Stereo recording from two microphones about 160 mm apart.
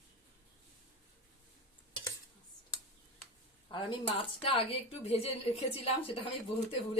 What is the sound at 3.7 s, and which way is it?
Speech, 30° left (ahead or behind).